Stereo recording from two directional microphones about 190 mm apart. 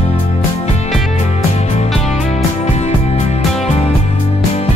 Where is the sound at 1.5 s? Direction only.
35° left (ahead or behind).